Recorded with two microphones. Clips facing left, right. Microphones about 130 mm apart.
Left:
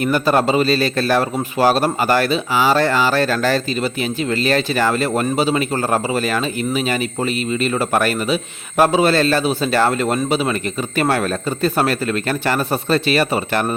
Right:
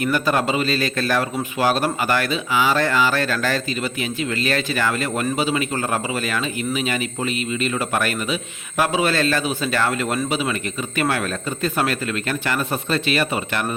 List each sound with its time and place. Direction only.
0.0 s a man's voice: 35° left (ahead or behind)